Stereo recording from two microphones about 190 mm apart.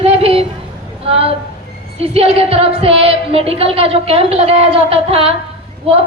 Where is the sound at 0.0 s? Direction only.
30° right (ahead or behind).